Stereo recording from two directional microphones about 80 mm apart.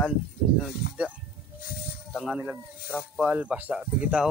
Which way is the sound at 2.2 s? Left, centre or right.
Centre.